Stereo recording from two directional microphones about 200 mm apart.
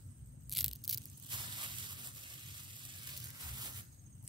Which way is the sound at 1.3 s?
25° right (ahead or behind).